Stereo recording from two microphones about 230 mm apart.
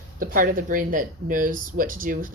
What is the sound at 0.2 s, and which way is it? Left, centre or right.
Speech, right.